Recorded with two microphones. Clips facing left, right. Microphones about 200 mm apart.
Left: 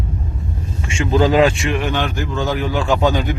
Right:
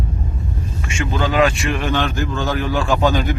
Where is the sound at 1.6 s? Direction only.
15° left (ahead or behind).